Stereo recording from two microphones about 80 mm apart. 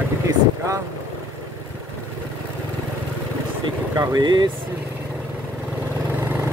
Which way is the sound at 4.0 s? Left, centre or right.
Right.